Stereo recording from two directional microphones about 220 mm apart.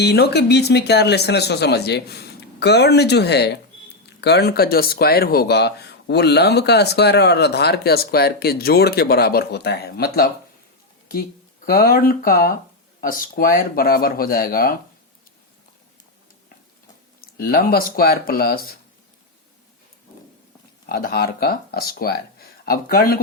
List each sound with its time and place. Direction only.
0.0 s speech: 50° left (ahead or behind)
17.2 s speech: 40° left (ahead or behind)
20.8 s speech: 45° left (ahead or behind)